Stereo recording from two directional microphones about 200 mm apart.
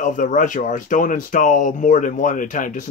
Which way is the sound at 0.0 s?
40° left (ahead or behind).